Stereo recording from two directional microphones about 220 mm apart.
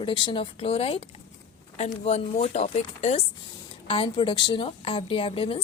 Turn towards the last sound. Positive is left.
turn(degrees=25)  # may be behind; listen again after turning